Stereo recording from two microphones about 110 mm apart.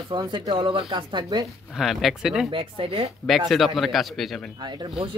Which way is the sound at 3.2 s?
Centre (ahead or behind).